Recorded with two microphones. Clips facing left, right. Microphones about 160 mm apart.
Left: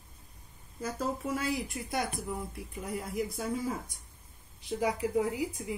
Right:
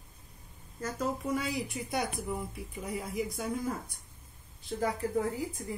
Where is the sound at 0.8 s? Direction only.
5° left (ahead or behind).